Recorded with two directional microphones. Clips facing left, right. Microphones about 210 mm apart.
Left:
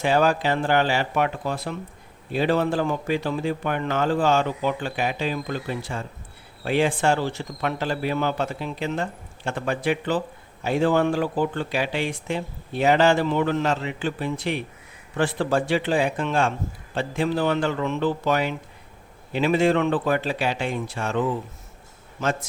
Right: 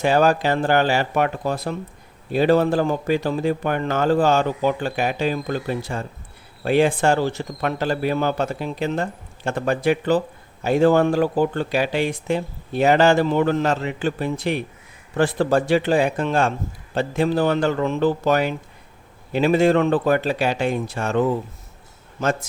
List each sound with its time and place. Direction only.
0.0 s speech: 40° right (ahead or behind)